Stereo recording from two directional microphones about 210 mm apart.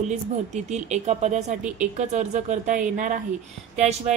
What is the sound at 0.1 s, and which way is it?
A woman's voice, 35° right (ahead or behind).